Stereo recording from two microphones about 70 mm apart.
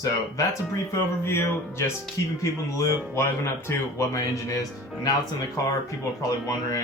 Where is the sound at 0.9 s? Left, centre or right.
Left.